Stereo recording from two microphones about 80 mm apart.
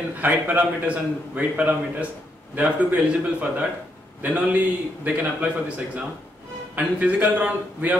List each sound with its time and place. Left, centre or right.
0.2 s a man's voice: right
6.7 s a man's voice: centre